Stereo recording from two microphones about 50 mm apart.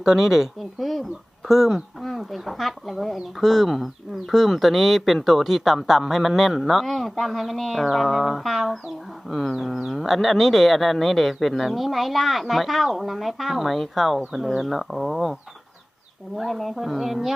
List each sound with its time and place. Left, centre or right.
0.0 s speech: centre
16.4 s speech: centre